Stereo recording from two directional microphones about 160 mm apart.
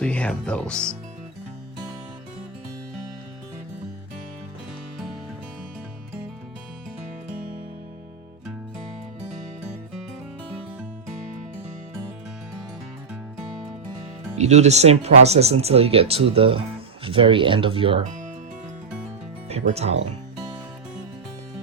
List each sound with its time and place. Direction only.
0.0 s speech: 5° left (ahead or behind)
14.3 s speech: 45° right (ahead or behind)
19.5 s speech: 40° right (ahead or behind)